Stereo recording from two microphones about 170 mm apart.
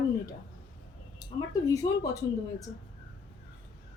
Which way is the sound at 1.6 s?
20° left (ahead or behind).